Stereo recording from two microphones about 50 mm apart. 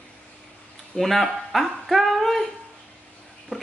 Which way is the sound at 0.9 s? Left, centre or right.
Centre.